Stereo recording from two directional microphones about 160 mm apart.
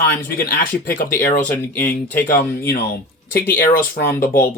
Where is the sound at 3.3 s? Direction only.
15° left (ahead or behind).